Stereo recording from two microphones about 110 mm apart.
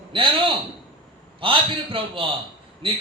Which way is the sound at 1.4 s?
55° right (ahead or behind).